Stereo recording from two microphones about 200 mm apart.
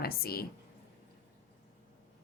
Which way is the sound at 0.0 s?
50° left (ahead or behind).